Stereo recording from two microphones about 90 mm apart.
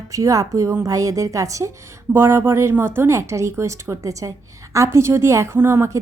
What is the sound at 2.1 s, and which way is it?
Speech, 25° right (ahead or behind).